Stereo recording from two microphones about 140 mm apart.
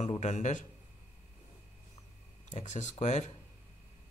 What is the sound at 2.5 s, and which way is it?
Speech, 60° left (ahead or behind).